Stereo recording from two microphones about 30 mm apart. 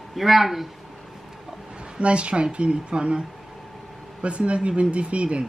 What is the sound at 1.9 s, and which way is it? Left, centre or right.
A woman's voice, right.